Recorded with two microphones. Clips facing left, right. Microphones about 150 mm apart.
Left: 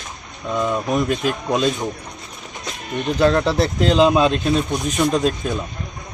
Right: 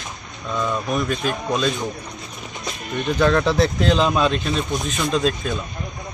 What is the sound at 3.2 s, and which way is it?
Speech, 30° left (ahead or behind).